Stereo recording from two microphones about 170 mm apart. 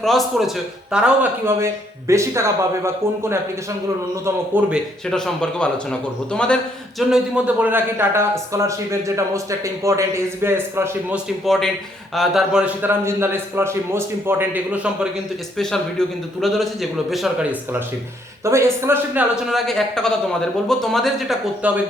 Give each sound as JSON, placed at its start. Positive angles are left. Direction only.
{"t": 0.0, "sound": "a man's voice", "side_deg": 0}
{"t": 5.1, "sound": "a man's voice", "side_deg": 5}
{"t": 7.1, "sound": "a man's voice", "side_deg": -5}
{"t": 12.1, "sound": "a man's voice", "side_deg": 0}
{"t": 15.5, "sound": "a man's voice", "side_deg": 5}
{"t": 19.5, "sound": "a man's voice", "side_deg": 0}